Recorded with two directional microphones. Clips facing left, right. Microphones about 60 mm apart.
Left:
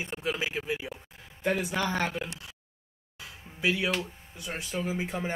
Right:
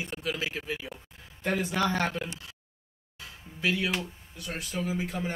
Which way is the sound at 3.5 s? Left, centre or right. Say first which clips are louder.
Left 1 dB; centre.